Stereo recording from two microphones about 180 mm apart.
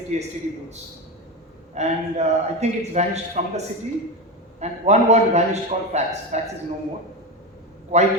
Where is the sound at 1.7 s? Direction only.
40° right (ahead or behind).